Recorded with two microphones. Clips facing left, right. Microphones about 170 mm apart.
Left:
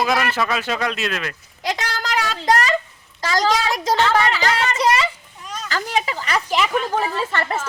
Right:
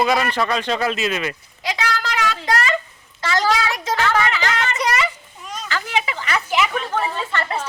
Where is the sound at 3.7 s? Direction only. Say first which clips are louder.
Left 2 dB; 35° left (ahead or behind).